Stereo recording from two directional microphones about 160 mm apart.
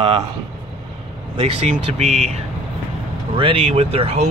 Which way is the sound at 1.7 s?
45° right (ahead or behind).